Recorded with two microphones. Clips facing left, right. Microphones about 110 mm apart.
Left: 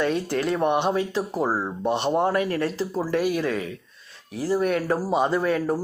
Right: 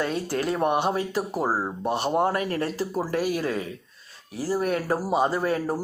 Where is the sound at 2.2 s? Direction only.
40° right (ahead or behind).